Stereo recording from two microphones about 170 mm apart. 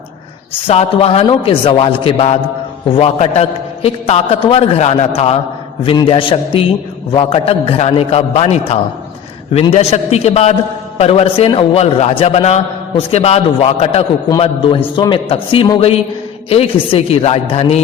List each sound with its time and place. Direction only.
0.7 s a man's voice: 35° left (ahead or behind)